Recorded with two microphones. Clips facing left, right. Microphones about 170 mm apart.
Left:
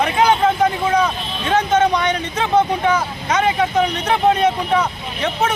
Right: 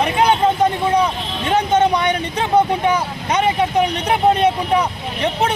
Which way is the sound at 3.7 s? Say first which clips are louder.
Even; 10° right (ahead or behind).